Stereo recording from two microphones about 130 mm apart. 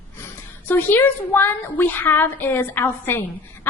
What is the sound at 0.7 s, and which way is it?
A woman's voice, 15° left (ahead or behind).